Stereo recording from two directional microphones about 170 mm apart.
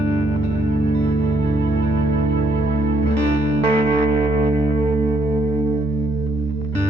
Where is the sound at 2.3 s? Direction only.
90° right.